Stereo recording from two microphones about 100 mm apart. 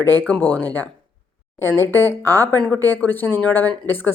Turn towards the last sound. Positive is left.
turn(degrees=20)  # may be behind; listen again after turning